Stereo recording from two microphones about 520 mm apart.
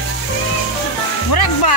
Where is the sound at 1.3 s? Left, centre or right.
Left.